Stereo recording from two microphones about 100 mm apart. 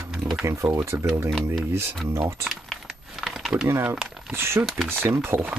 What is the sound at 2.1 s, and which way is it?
Speech, 30° right (ahead or behind).